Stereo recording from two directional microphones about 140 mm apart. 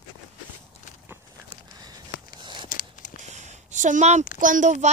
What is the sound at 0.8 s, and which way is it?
Walk, 60° left (ahead or behind).